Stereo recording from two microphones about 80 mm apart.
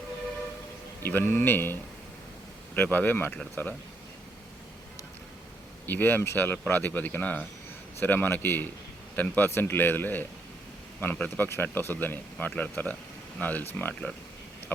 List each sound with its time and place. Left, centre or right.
1.0 s speech: left
5.8 s speech: left